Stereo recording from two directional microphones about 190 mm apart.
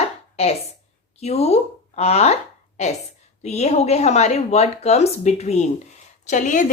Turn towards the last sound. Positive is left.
turn(degrees=40)  # may be behind; listen again after turning